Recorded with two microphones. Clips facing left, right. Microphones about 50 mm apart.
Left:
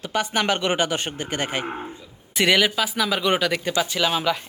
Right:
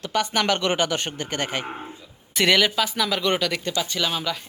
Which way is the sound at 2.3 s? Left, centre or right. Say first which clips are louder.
Even; centre.